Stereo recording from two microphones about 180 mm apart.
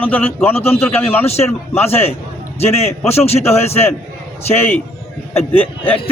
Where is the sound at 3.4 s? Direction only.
15° left (ahead or behind).